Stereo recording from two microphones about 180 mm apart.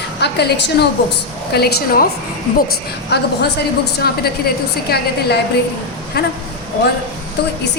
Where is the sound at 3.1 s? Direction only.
70° left (ahead or behind).